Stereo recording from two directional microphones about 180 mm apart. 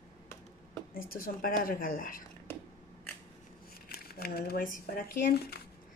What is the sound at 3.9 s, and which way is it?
Speech, 60° left (ahead or behind).